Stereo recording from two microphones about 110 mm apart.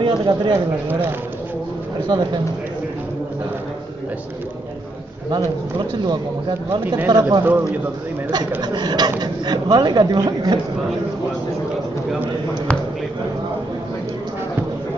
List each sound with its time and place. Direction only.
0.0 s speech: 45° right (ahead or behind)
0.5 s speech: 20° right (ahead or behind)
2.0 s speech: 40° right (ahead or behind)
7.1 s speech: 40° right (ahead or behind)
8.5 s speech: 40° right (ahead or behind)